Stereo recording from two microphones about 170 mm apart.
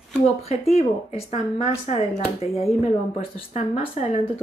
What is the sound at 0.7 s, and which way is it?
Speech, 40° left (ahead or behind).